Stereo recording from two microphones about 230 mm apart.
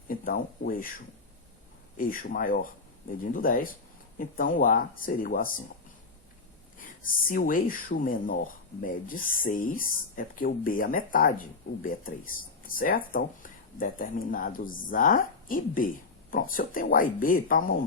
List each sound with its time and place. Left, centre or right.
0.1 s speech: left
6.7 s speech: left